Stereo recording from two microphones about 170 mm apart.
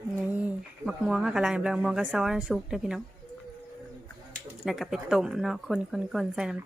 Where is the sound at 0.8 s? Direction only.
5° right (ahead or behind).